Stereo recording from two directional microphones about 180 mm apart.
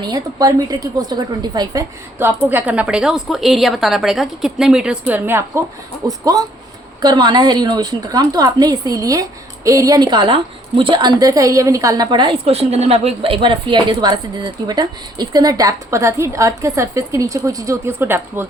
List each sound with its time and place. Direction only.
0.0 s a woman's voice: 20° right (ahead or behind)
2.1 s a woman's voice: 10° right (ahead or behind)